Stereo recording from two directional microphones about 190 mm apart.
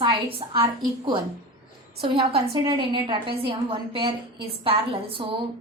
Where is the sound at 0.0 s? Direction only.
30° right (ahead or behind).